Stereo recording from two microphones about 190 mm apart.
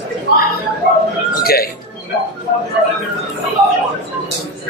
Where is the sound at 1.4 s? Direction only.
55° left (ahead or behind).